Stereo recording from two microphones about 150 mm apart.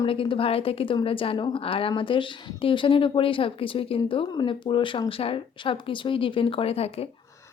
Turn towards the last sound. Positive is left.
turn(degrees=40)  # may be behind; listen again after turning